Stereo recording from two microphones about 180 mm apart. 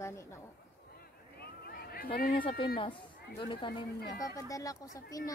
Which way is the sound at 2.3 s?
30° left (ahead or behind).